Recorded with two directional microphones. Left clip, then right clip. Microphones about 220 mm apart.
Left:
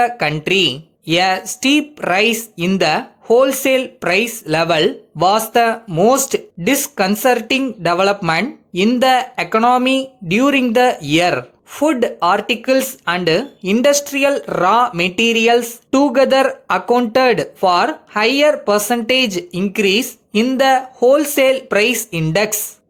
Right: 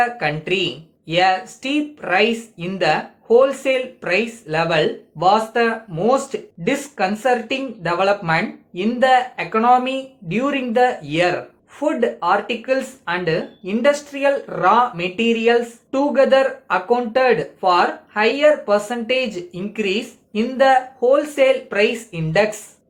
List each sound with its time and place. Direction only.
0.0 s speech: 50° left (ahead or behind)